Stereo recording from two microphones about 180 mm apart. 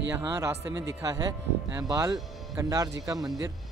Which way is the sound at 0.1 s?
15° right (ahead or behind).